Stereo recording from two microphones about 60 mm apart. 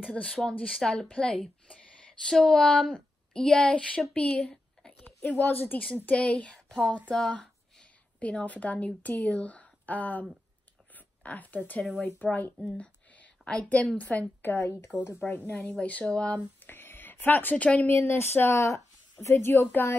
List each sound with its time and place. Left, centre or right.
0.1 s a woman's voice: centre
5.4 s a woman's voice: left
6.0 s a woman's voice: centre
12.6 s a sound: left
13.5 s a woman's voice: left
14.4 s speech: left
15.1 s a woman's voice: left
16.5 s a sound: left
17.9 s speech: left
18.6 s speech: left